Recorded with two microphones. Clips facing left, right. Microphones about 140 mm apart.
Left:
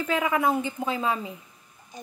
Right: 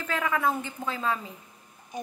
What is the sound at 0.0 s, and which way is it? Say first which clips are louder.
A woman's voice: left 3 dB; 15° left (ahead or behind).